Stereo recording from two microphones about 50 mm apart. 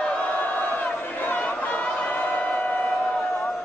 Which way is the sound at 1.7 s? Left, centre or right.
Centre.